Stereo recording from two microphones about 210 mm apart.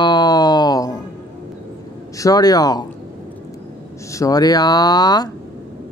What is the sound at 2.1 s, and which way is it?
Speech, 15° left (ahead or behind).